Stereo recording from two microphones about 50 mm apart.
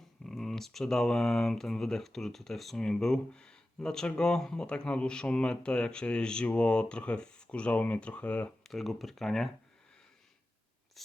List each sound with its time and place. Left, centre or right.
0.3 s speech: centre; by 8.5 s left
8.6 s speech: centre
11.0 s a sound: centre